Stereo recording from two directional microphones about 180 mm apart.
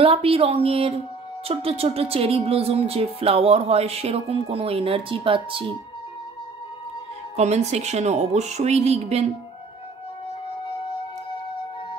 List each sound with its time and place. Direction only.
0.0 s speech: 30° right (ahead or behind)
7.3 s speech: 35° right (ahead or behind)